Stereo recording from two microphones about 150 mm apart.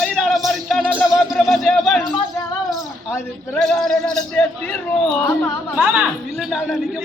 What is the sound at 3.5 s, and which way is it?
Speech, centre (ahead or behind).